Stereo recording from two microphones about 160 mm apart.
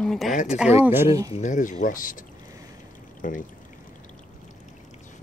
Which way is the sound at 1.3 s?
50° left (ahead or behind).